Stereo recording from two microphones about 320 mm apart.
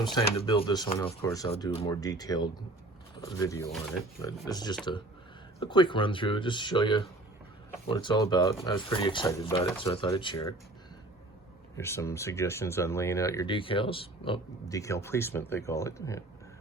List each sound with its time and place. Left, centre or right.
0.3 s speech: centre
11.8 s speech: centre